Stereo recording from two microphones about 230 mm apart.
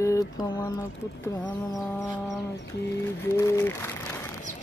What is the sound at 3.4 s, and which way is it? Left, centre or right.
Speech, centre.